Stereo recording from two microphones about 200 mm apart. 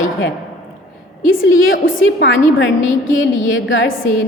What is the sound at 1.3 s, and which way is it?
A woman's voice, 75° left (ahead or behind).